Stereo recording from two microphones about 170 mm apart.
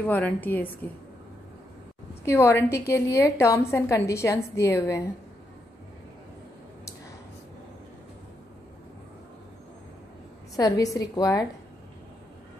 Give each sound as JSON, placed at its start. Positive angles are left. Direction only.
{"t": 0.0, "sound": "a woman's voice", "side_deg": 10}
{"t": 2.2, "sound": "a woman's voice", "side_deg": 15}
{"t": 10.5, "sound": "a woman's voice", "side_deg": 20}